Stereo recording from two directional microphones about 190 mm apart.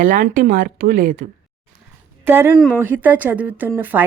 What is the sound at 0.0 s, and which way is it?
Speech, 45° right (ahead or behind).